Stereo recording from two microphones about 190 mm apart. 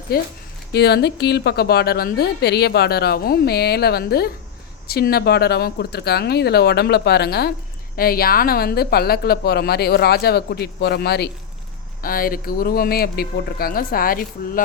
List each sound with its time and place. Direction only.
0.1 s a woman's voice: 55° left (ahead or behind)